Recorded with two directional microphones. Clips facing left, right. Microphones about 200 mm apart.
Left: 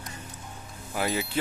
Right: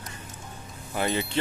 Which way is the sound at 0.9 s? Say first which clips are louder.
Right 1 dB; 5° left (ahead or behind).